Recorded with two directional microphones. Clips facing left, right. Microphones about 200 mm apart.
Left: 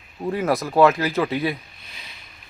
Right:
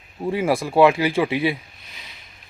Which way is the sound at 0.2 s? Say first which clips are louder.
Right 1 dB; 5° right (ahead or behind).